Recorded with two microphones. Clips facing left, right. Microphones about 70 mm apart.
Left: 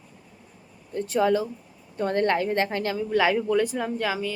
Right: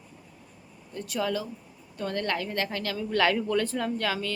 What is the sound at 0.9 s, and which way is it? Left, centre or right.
Speech, left.